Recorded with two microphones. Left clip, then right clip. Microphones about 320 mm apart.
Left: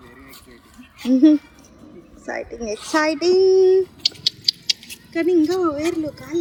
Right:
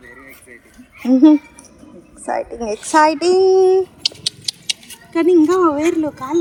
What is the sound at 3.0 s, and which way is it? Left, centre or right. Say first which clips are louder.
Child singing: right 5 dB; centre.